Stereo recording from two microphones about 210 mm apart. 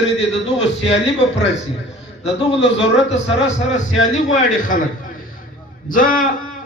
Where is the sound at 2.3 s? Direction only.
55° left (ahead or behind).